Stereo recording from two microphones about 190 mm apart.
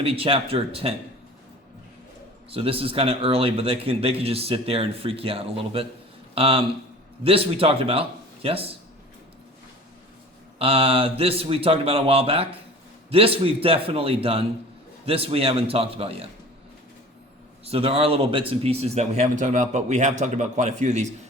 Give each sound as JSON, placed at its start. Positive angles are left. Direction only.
{"t": 0.0, "sound": "speech", "side_deg": -30}
{"t": 2.5, "sound": "speech", "side_deg": -30}
{"t": 10.6, "sound": "speech", "side_deg": -30}
{"t": 17.7, "sound": "speech", "side_deg": -30}